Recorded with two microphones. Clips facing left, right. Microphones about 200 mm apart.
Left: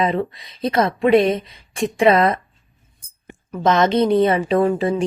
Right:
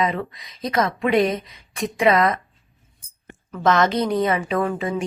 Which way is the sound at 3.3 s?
15° left (ahead or behind).